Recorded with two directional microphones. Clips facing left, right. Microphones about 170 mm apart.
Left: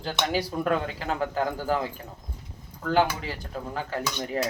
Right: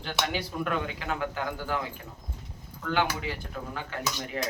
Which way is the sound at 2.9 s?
35° left (ahead or behind).